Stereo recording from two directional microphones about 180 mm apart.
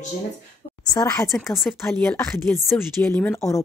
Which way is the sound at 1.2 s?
Centre (ahead or behind).